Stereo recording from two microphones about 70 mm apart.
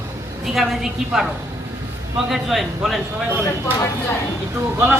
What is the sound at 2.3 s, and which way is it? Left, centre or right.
Speech, centre.